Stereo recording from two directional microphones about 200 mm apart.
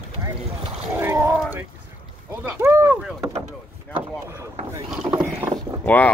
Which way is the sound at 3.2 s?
20° right (ahead or behind).